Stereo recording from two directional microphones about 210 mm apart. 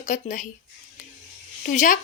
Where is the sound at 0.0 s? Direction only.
35° left (ahead or behind).